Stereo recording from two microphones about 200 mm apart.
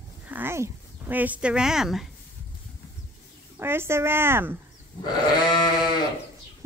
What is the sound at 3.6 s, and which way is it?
Baby cry, 10° right (ahead or behind).